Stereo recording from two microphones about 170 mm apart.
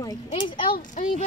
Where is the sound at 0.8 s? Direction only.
50° left (ahead or behind).